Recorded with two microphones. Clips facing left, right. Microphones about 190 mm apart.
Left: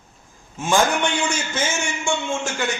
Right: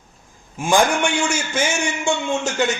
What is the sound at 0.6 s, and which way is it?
A man's voice, 15° right (ahead or behind).